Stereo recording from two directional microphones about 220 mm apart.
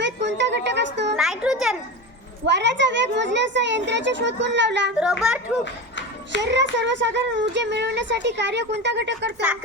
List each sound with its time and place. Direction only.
0.0 s music: 55° right (ahead or behind)
1.1 s music: centre (ahead or behind)
2.5 s speech: 55° right (ahead or behind)
4.9 s speech: 5° right (ahead or behind)
6.4 s speech: 55° right (ahead or behind)